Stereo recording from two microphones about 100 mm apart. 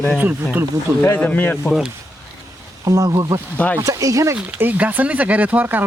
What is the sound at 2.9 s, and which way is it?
Speech, 35° right (ahead or behind).